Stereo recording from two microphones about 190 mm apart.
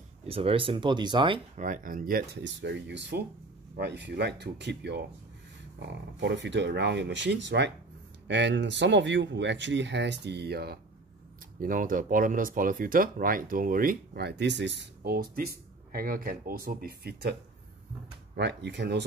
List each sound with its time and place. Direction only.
0.3 s speech: 30° right (ahead or behind)
1.6 s speech: 45° right (ahead or behind)
2.4 s speech: 65° right (ahead or behind)
6.1 s speech: 65° right (ahead or behind)
11.6 s speech: 45° right (ahead or behind); by 15.1 s 70° right (ahead or behind)
15.1 s speech: 50° right (ahead or behind)